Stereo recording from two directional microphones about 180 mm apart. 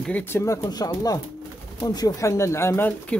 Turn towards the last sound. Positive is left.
turn(degrees=10)  # may be behind; listen again after turning